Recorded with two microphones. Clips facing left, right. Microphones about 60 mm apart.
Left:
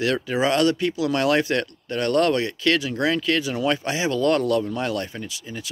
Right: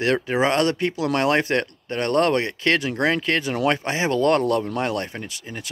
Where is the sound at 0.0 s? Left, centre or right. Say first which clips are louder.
Right 2 dB; right.